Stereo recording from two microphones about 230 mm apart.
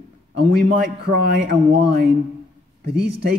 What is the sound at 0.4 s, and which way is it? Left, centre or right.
A man's voice, right.